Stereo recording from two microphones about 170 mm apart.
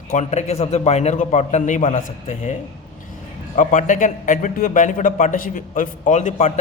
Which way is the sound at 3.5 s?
50° left (ahead or behind).